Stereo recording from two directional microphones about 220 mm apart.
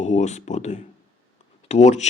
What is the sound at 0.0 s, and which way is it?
A man's voice, 30° left (ahead or behind).